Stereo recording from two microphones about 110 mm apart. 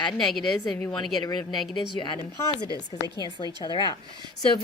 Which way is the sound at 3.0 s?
40° left (ahead or behind).